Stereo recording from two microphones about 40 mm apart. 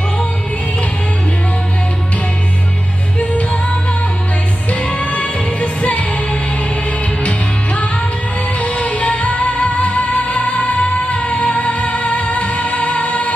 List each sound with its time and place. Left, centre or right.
4.6 s music: left
7.2 s music: left